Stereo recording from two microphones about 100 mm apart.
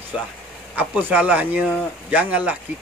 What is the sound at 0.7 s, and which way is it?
A man's voice, 15° right (ahead or behind).